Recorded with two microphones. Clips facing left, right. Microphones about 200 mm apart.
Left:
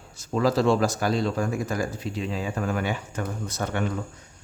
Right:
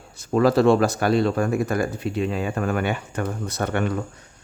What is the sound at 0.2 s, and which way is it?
Speech, 60° right (ahead or behind).